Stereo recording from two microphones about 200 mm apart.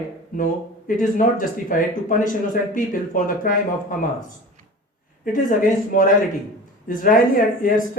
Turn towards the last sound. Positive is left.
turn(degrees=45)  # may be behind; listen again after turning